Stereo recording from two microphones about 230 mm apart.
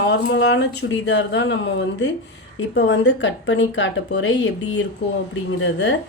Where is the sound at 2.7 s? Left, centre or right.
Left.